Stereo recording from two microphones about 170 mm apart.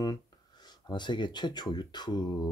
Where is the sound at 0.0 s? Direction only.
25° left (ahead or behind).